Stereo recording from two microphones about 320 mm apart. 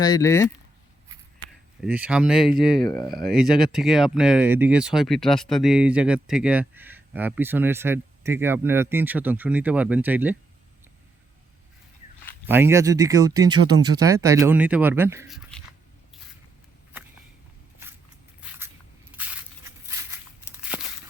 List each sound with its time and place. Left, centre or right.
0.0 s speech: centre
1.8 s speech: centre
3.2 s speech: right
3.4 s speech: centre
12.5 s speech: centre
19.1 s a sound: centre